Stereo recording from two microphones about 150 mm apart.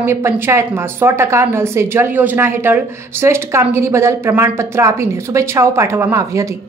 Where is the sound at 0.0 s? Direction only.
15° right (ahead or behind).